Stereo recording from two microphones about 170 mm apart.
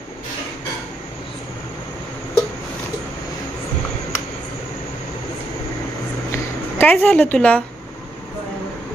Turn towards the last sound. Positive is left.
turn(degrees=10)  # may be behind; listen again after turning